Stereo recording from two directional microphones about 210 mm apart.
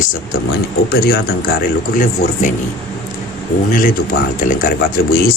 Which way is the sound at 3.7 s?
40° left (ahead or behind).